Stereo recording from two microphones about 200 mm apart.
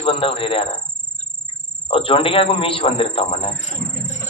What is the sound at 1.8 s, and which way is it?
A man's voice, 25° left (ahead or behind).